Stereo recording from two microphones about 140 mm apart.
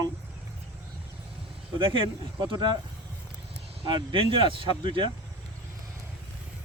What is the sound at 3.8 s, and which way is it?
Speech, 40° right (ahead or behind).